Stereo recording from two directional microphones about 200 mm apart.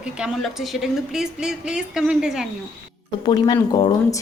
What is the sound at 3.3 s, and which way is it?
Speech, 20° left (ahead or behind).